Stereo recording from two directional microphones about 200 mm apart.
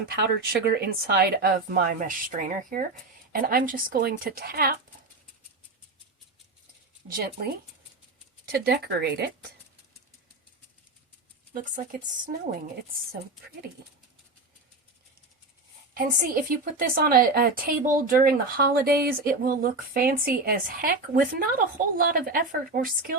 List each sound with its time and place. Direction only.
0.6 s a woman's voice: 55° right (ahead or behind)
7.1 s a woman's voice: 50° right (ahead or behind)
11.5 s speech: 40° right (ahead or behind)
16.0 s a woman's voice: 45° right (ahead or behind)